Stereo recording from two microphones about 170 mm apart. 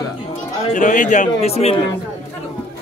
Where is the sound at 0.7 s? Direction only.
50° left (ahead or behind).